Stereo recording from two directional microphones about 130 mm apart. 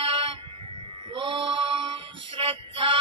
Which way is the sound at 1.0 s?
40° right (ahead or behind).